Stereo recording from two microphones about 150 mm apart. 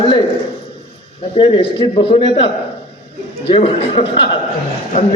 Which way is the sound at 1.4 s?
40° left (ahead or behind).